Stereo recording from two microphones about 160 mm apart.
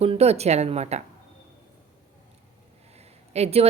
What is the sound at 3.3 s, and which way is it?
Speech, 40° right (ahead or behind).